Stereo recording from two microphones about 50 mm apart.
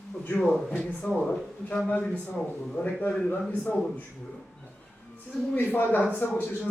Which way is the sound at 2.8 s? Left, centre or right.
Left.